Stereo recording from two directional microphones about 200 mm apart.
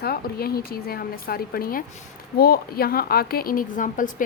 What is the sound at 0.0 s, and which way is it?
A woman's voice, 50° left (ahead or behind).